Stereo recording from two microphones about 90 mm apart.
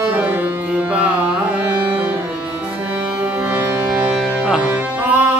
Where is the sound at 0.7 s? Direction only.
15° right (ahead or behind).